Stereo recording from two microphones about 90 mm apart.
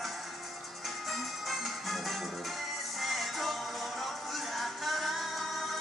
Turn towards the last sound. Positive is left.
turn(degrees=0)  # may be behind; listen again after turning